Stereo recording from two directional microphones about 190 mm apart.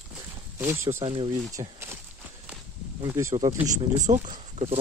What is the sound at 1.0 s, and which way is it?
Speech, 30° right (ahead or behind).